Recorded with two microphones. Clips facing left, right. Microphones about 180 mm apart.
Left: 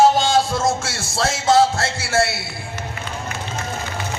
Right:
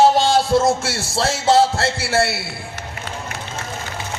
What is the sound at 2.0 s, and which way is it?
Speech, 60° right (ahead or behind).